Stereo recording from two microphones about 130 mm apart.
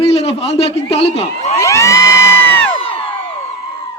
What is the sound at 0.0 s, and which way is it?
A man's voice, 50° left (ahead or behind).